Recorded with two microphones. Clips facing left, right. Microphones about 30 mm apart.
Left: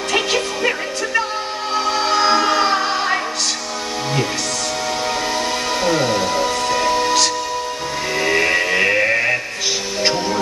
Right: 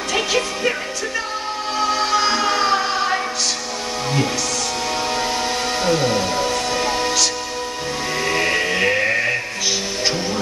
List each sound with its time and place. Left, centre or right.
0.1 s music: centre
5.9 s music: centre
8.2 s music: centre